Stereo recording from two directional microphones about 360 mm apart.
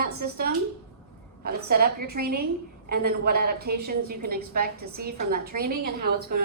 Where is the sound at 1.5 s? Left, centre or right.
Right.